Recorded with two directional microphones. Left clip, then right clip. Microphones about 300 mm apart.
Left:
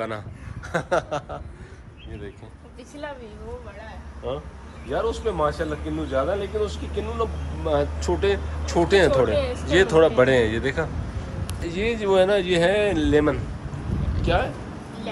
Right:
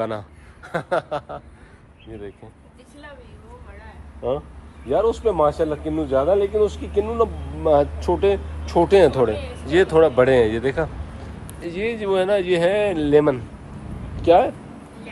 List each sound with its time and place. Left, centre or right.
0.0 s a man's voice: centre
4.9 s a man's voice: centre